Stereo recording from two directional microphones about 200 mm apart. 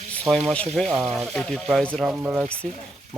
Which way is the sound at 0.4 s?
5° left (ahead or behind).